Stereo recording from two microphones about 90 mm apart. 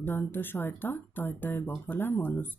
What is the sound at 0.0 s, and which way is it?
Speech, 25° left (ahead or behind).